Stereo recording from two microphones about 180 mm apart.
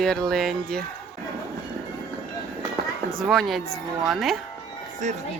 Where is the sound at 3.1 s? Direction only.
Centre (ahead or behind).